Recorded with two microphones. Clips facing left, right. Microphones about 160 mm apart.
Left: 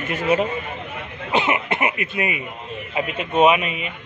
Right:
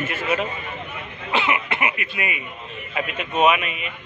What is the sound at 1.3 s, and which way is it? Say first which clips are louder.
Cough: left 2 dB; 40° left (ahead or behind).